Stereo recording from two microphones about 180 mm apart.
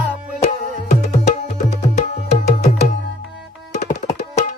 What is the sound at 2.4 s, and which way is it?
Music, 40° left (ahead or behind).